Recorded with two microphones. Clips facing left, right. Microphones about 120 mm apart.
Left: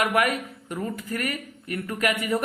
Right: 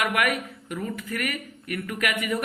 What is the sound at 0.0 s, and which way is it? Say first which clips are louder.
Speech: left 2 dB; 35° left (ahead or behind).